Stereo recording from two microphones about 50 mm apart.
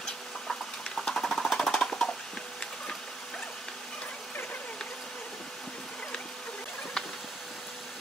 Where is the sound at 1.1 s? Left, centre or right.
Centre.